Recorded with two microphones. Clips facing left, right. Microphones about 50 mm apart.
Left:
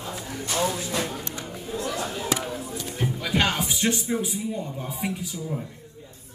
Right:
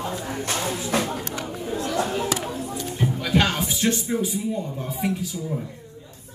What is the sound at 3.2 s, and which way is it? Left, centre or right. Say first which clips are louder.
Speech: right 2 dB; centre.